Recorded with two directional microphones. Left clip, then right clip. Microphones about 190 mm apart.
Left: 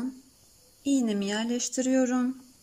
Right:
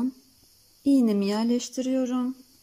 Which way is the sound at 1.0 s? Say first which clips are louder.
Right 4 dB; 25° right (ahead or behind).